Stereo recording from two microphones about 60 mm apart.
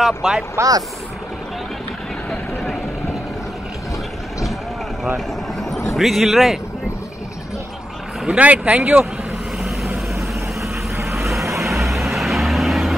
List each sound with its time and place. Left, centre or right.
0.2 s speech: centre
0.6 s speech: right
5.0 s vehicle: centre
5.9 s speech: centre
8.3 s speech: right
11.1 s vehicle: centre